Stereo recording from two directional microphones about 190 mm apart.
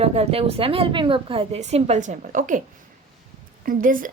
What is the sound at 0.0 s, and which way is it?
A woman's voice, 30° right (ahead or behind).